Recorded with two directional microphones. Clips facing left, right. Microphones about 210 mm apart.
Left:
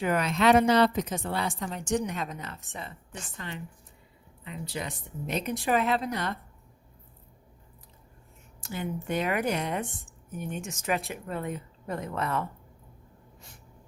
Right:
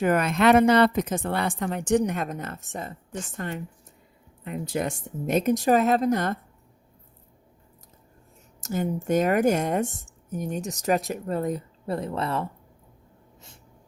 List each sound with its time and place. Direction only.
0.0 s speech: 50° right (ahead or behind)
8.6 s speech: 45° right (ahead or behind)